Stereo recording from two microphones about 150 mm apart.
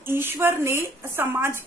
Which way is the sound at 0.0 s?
15° right (ahead or behind).